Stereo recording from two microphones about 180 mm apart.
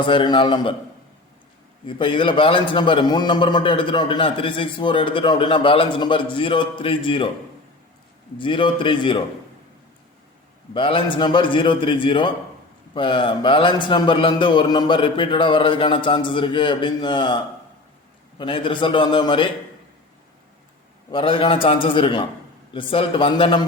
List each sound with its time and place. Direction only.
0.0 s a man's voice: 25° left (ahead or behind)
1.9 s a man's voice: 25° left (ahead or behind)
8.4 s a man's voice: 25° left (ahead or behind)
10.8 s a man's voice: 30° left (ahead or behind)
18.3 s a man's voice: 30° left (ahead or behind)
21.1 s a man's voice: 30° left (ahead or behind)